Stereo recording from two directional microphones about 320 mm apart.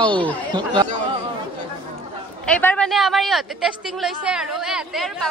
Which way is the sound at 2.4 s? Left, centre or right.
Centre.